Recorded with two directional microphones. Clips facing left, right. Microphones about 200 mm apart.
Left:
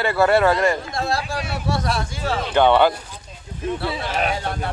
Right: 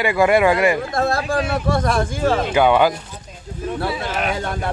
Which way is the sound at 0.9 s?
55° right (ahead or behind).